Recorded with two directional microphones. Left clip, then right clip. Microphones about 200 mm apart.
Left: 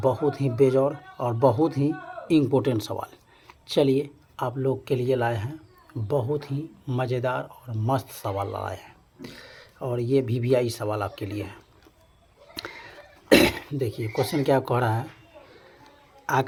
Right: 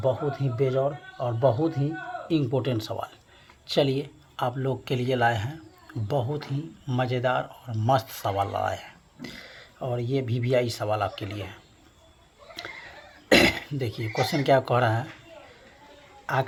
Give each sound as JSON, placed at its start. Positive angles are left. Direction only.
{"t": 0.0, "sound": "speech", "side_deg": 30}
{"t": 13.2, "sound": "speech", "side_deg": 20}
{"t": 16.2, "sound": "speech", "side_deg": 30}